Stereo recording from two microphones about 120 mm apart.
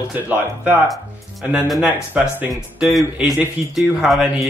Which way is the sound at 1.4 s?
10° right (ahead or behind).